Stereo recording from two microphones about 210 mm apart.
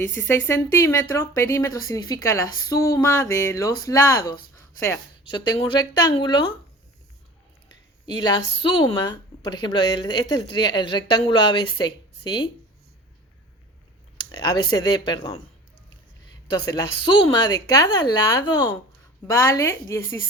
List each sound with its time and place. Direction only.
0.0 s a woman's voice: 10° left (ahead or behind)
8.0 s speech: 20° left (ahead or behind)
14.3 s a sound: 20° left (ahead or behind)
14.9 s speech: 20° left (ahead or behind)
16.5 s a woman's voice: 20° left (ahead or behind)